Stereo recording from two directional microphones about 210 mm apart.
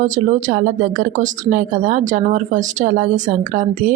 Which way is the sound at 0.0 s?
35° right (ahead or behind).